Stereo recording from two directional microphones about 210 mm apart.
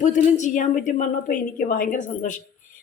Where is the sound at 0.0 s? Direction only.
35° left (ahead or behind).